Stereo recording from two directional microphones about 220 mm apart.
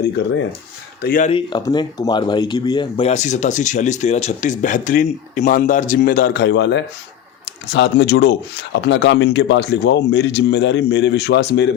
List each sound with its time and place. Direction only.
1.0 s speech: 40° left (ahead or behind)
1.3 s speech: 20° left (ahead or behind)
3.1 s speech: 35° left (ahead or behind); by 11.7 s 50° left (ahead or behind)